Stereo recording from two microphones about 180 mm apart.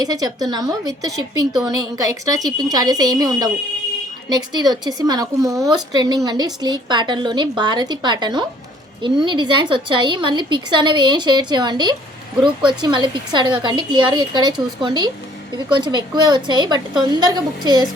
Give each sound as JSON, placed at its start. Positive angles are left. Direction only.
{"t": 0.0, "sound": "a woman's voice", "side_deg": -20}